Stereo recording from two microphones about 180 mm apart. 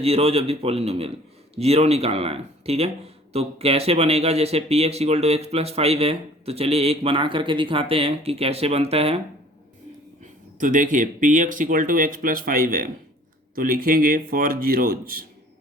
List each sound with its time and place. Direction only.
0.0 s speech: 35° right (ahead or behind)
10.6 s speech: 45° right (ahead or behind)